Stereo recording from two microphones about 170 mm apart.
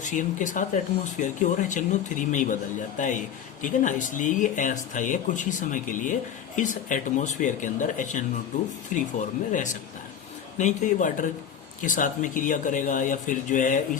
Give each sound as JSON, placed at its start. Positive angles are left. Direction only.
{"t": 0.0, "sound": "speech", "side_deg": 50}